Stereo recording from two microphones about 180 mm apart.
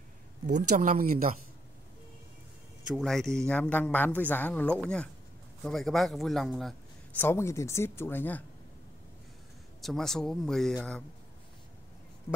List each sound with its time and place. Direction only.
0.6 s speech: 45° right (ahead or behind)
2.9 s speech: centre (ahead or behind)
7.2 s speech: 15° left (ahead or behind)
9.8 s speech: centre (ahead or behind)